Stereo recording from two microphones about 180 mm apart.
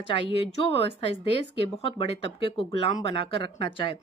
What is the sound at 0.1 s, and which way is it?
A woman's voice, 30° left (ahead or behind).